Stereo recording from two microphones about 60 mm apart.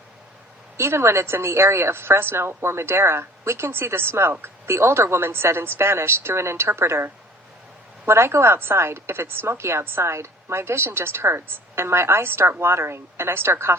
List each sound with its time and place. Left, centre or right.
0.8 s a woman's voice: right